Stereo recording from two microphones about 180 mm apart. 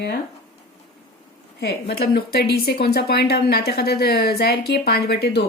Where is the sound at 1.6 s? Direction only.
65° left (ahead or behind).